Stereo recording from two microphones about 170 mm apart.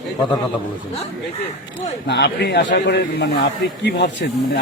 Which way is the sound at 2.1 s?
90° left.